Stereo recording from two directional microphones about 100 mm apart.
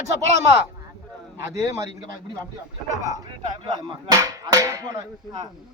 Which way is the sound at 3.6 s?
50° right (ahead or behind).